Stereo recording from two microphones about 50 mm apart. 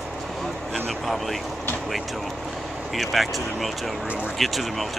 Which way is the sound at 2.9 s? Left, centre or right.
Centre.